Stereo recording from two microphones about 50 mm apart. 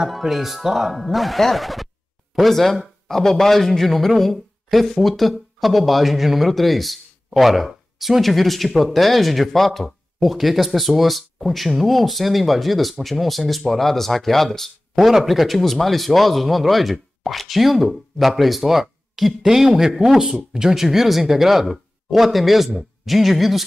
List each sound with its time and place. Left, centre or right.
0.0 s a man's voice: centre